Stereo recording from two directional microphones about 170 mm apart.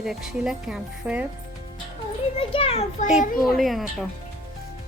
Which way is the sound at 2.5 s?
35° left (ahead or behind).